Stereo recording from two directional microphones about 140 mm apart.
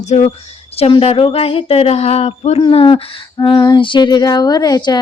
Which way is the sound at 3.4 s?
30° left (ahead or behind).